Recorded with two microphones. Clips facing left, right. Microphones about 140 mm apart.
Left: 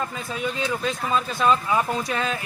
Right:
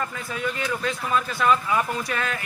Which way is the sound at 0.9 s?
20° left (ahead or behind).